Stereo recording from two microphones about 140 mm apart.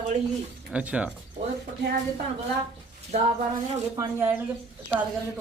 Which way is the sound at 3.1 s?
50° right (ahead or behind).